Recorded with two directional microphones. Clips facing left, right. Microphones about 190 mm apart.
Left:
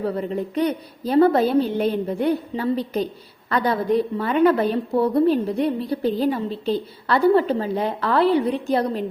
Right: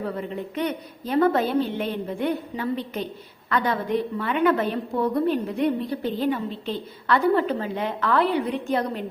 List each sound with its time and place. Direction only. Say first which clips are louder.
0.0 s a woman's voice: left 5 dB; 35° left (ahead or behind)